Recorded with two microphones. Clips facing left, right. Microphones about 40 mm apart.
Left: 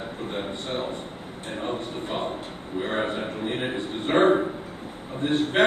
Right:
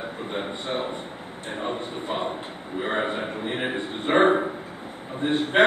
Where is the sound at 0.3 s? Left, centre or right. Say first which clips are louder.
Right 2 dB; centre.